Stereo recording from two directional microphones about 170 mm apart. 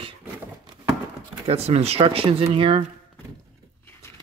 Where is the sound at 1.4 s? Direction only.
35° right (ahead or behind).